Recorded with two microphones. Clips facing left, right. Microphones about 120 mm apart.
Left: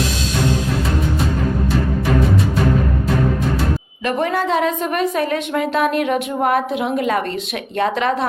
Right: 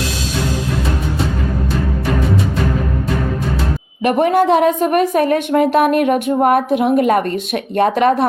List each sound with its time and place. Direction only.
4.0 s a woman's voice: 50° right (ahead or behind)